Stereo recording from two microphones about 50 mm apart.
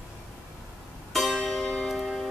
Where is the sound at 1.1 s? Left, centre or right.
Centre.